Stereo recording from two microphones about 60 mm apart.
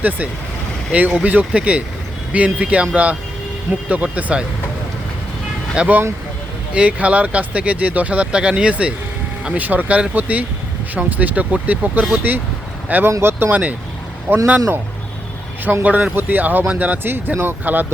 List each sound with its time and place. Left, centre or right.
0.9 s speech: right
5.7 s speech: centre; by 14.4 s right
15.8 s speech: right